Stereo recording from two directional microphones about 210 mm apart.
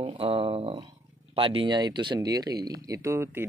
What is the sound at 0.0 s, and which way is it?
Speech, 25° right (ahead or behind).